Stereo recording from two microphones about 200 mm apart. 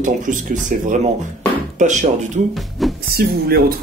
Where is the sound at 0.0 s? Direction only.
40° right (ahead or behind).